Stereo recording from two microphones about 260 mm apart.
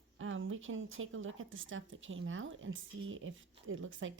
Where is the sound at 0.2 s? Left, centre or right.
Right.